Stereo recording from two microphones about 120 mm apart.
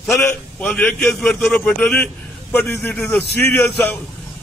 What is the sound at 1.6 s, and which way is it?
Speech, 15° left (ahead or behind).